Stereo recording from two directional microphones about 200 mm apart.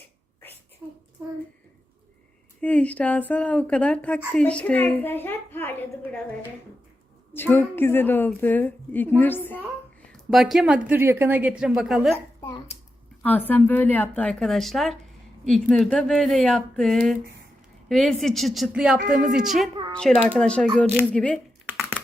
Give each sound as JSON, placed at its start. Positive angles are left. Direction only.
{"t": 0.8, "sound": "child singing", "side_deg": -10}
{"t": 2.6, "sound": "a woman's voice", "side_deg": 5}
{"t": 7.3, "sound": "a woman's voice", "side_deg": 10}
{"t": 12.4, "sound": "hands", "side_deg": 20}
{"t": 13.5, "sound": "a woman's voice", "side_deg": 10}
{"t": 19.0, "sound": "speech", "side_deg": -45}
{"t": 19.3, "sound": "a woman's voice", "side_deg": 0}
{"t": 21.7, "sound": "typing", "side_deg": -5}